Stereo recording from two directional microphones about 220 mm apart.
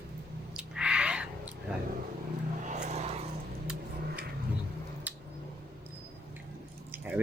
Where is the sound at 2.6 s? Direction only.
30° right (ahead or behind).